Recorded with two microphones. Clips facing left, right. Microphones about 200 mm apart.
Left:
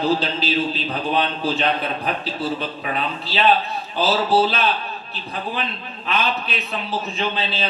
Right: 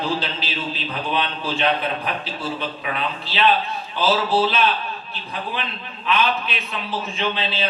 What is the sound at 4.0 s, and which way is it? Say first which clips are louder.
Speech: left 1 dB; 40° left (ahead or behind).